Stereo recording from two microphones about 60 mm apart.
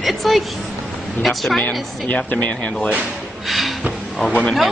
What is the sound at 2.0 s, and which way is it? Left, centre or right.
Speech, left.